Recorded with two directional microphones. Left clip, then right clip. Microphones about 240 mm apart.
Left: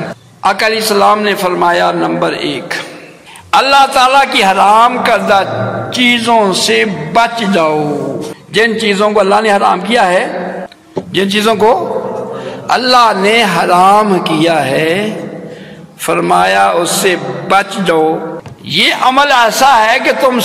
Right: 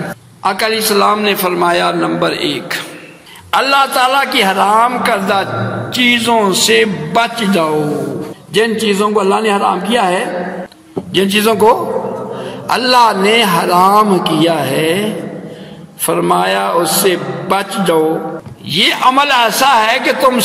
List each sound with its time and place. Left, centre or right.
0.4 s a man's voice: right